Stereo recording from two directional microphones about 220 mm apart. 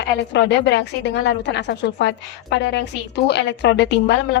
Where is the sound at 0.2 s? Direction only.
50° left (ahead or behind).